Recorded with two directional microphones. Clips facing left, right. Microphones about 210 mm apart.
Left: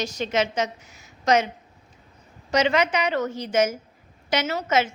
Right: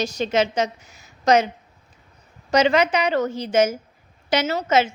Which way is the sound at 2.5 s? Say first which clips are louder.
Right 3 dB; 35° right (ahead or behind).